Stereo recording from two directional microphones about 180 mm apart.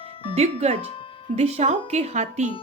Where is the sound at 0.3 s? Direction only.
35° right (ahead or behind).